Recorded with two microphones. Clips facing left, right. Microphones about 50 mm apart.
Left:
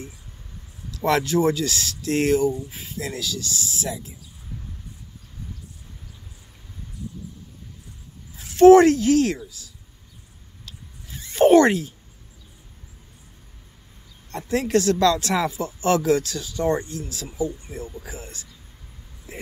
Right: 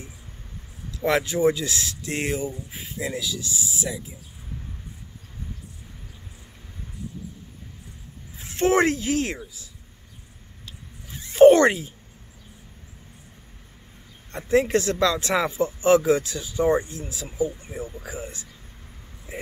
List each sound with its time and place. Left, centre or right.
0.9 s speech: centre
8.4 s speech: right
10.6 s a sound: centre
14.5 s speech: right